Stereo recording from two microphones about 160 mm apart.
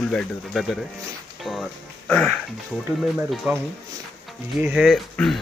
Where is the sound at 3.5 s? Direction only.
15° right (ahead or behind); by 5.3 s centre (ahead or behind).